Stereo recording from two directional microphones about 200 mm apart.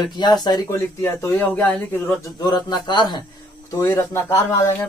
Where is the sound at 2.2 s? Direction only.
20° left (ahead or behind).